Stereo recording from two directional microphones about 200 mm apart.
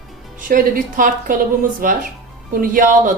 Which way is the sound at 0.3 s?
45° right (ahead or behind).